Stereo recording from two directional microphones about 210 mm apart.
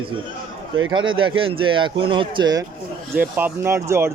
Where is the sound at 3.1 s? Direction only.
10° right (ahead or behind).